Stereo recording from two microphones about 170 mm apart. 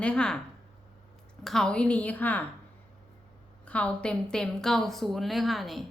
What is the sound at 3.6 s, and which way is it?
A woman's voice, 5° left (ahead or behind).